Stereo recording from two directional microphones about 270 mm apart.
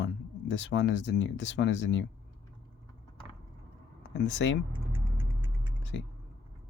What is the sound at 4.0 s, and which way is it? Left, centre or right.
Speech, left.